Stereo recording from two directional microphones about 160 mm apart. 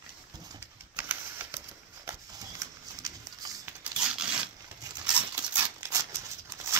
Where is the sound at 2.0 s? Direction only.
25° right (ahead or behind).